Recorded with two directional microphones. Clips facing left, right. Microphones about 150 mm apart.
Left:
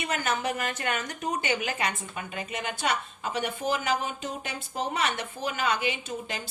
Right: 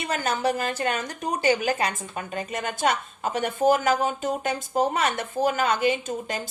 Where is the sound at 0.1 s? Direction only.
35° right (ahead or behind).